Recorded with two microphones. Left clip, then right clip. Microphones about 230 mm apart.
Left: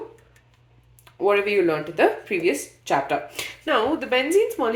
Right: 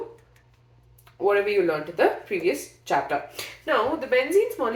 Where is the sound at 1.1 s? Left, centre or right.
Left.